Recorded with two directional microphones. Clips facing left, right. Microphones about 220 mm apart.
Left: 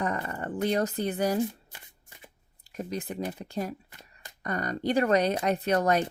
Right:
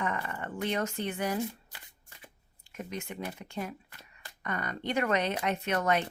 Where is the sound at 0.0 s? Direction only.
35° left (ahead or behind).